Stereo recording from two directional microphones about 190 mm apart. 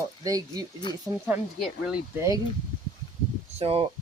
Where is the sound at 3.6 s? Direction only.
30° right (ahead or behind).